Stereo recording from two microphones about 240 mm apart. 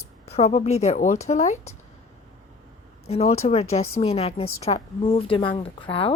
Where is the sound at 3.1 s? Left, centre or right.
Left.